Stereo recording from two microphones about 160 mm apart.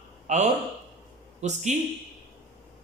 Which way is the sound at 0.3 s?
50° right (ahead or behind).